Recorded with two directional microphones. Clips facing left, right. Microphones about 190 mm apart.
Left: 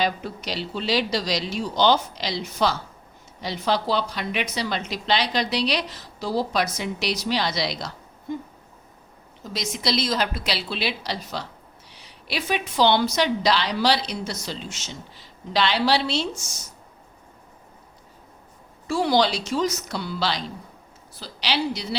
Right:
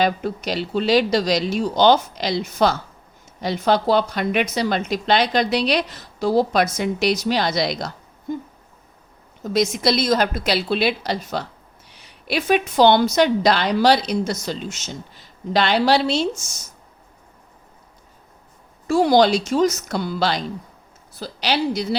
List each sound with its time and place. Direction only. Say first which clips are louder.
0.0 s a woman's voice: right 5 dB; 50° right (ahead or behind)
9.4 s a woman's voice: right 10 dB; 55° right (ahead or behind)
18.9 s a woman's voice: right 6 dB; 45° right (ahead or behind)